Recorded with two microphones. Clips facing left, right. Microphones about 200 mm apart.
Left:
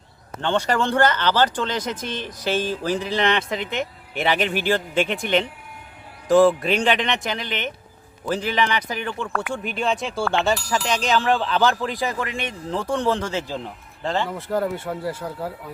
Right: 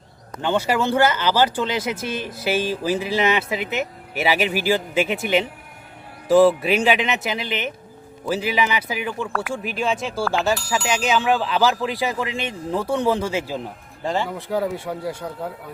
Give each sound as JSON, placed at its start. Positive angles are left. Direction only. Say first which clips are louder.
{"t": 0.4, "sound": "speech", "louder": "right 1 dB", "side_deg": -10}
{"t": 12.2, "sound": "speech", "louder": "right 2 dB", "side_deg": -25}
{"t": 12.7, "sound": "speech", "louder": "right 2 dB", "side_deg": -10}
{"t": 14.3, "sound": "speech", "louder": "even", "side_deg": 0}